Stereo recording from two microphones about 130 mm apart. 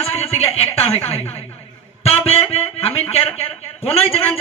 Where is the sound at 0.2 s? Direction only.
50° left (ahead or behind).